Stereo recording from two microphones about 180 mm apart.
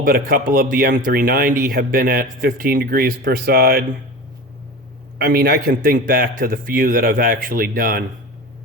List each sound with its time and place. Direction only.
0.0 s speech: 50° right (ahead or behind)
5.1 s speech: 60° right (ahead or behind)